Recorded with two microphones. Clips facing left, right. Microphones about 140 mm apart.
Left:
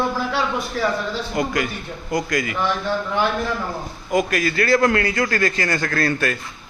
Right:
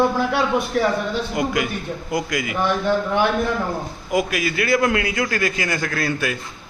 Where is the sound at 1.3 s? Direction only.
10° right (ahead or behind).